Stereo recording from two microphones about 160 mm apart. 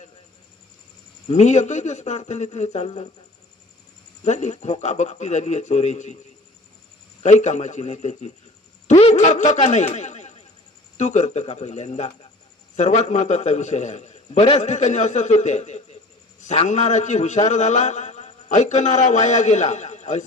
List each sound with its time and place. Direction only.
1.3 s a man's voice: 45° left (ahead or behind)
4.2 s a man's voice: 45° left (ahead or behind)
7.2 s a man's voice: 45° left (ahead or behind)